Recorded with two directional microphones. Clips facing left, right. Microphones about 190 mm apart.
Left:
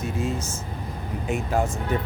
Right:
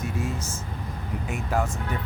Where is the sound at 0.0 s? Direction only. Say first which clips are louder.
Left 3 dB; 25° left (ahead or behind).